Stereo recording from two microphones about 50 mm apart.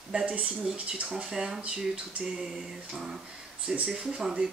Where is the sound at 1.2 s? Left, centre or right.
Centre.